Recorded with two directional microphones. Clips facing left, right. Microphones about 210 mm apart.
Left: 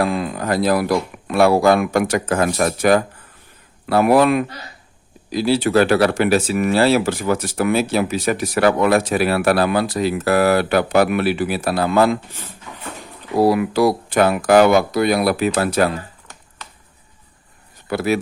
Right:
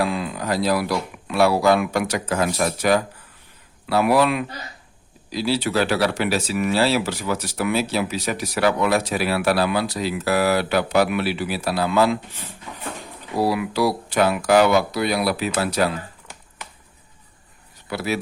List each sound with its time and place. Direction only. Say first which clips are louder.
0.0 s speech: left 3 dB; 45° left (ahead or behind)
13.3 s speech: left 6 dB; 50° left (ahead or behind)
17.8 s speech: left 6 dB; 50° left (ahead or behind)